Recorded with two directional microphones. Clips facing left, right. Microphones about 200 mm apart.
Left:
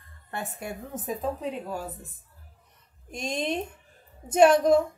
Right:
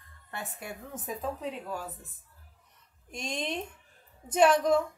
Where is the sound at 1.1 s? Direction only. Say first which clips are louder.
Left 4 dB; 25° left (ahead or behind).